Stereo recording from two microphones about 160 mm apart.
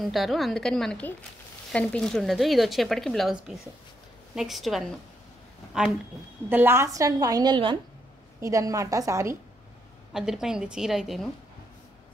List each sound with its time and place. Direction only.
0.0 s a woman's voice: centre (ahead or behind); by 7.8 s 30° right (ahead or behind)
8.4 s a woman's voice: 20° right (ahead or behind)
10.1 s speech: 5° right (ahead or behind)